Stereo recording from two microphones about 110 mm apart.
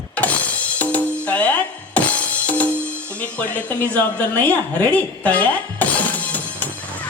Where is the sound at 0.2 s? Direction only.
15° left (ahead or behind).